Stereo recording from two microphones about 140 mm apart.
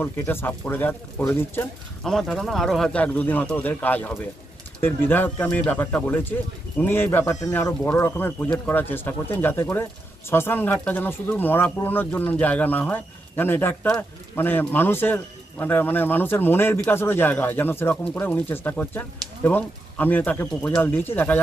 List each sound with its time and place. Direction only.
0.0 s a man's voice: 15° left (ahead or behind)
2.0 s a man's voice: 5° left (ahead or behind)